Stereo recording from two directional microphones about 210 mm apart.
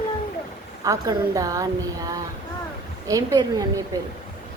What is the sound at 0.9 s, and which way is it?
Speech, 15° right (ahead or behind).